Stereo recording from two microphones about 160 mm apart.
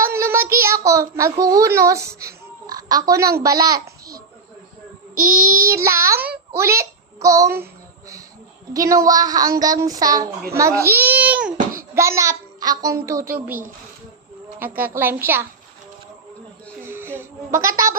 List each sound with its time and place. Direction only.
0.0 s child singing: 15° right (ahead or behind)
0.9 s a woman's voice: 20° right (ahead or behind)
2.2 s a sound: 25° right (ahead or behind)
5.6 s a child's voice: 15° right (ahead or behind)
14.6 s a child's voice: 10° right (ahead or behind)
16.8 s a sound: 15° right (ahead or behind)